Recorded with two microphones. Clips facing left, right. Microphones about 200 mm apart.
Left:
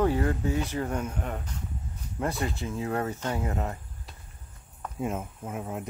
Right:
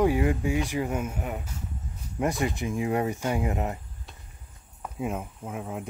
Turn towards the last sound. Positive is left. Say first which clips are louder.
# even
turn(degrees=0)  # may be behind; listen again after turning